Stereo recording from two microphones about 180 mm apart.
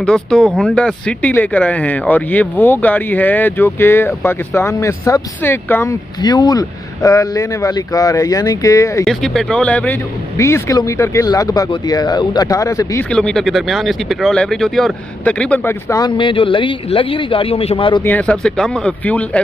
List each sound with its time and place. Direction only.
0.0 s speech: 5° left (ahead or behind)
6.2 s speech: 25° left (ahead or behind)
9.0 s speech: centre (ahead or behind); by 13.0 s 15° left (ahead or behind)
13.1 s speech: 5° left (ahead or behind)
15.9 s speech: 25° left (ahead or behind)
18.0 s speech: 10° left (ahead or behind)